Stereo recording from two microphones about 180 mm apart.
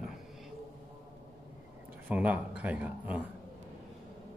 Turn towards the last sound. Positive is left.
turn(degrees=-10)  # may be behind; listen again after turning